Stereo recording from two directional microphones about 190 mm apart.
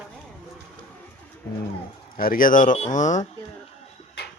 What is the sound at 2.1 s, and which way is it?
Speech, 45° left (ahead or behind).